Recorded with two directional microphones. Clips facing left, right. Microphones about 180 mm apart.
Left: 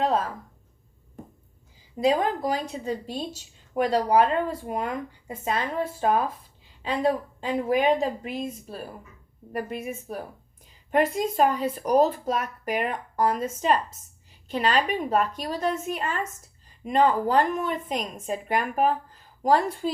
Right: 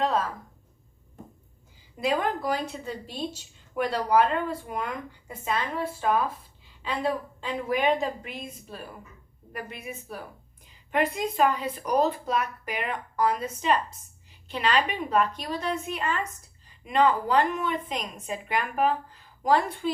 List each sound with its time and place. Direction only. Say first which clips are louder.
2.0 s a woman's voice: left 4 dB; 40° left (ahead or behind)